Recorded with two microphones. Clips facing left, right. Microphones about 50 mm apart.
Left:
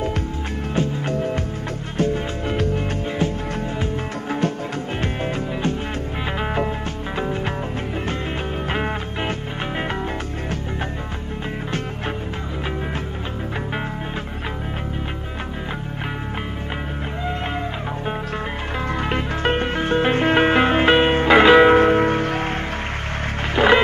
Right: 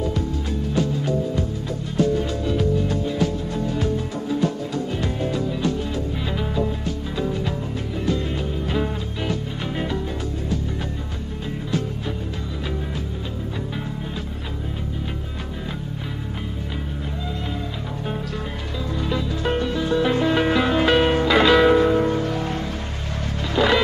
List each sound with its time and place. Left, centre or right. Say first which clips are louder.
0.7 s music: even; left
1.1 s music: left 2 dB; left
2.0 s music: right 1 dB; left
4.3 s music: even; left
8.6 s music: left 1 dB; left
18.9 s music: even; left
21.7 s music: left 3 dB; left
23.5 s music: left 4 dB; left